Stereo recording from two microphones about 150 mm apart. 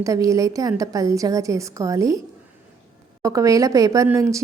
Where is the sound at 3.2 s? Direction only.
20° right (ahead or behind).